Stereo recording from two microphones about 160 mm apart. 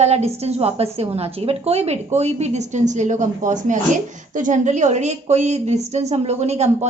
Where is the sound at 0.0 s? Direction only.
40° right (ahead or behind).